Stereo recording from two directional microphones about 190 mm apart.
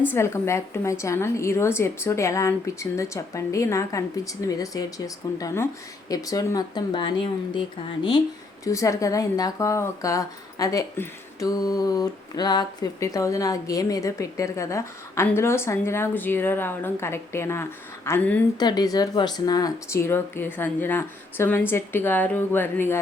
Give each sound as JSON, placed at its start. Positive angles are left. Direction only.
{"t": 0.0, "sound": "speech", "side_deg": 10}
{"t": 8.6, "sound": "speech", "side_deg": 15}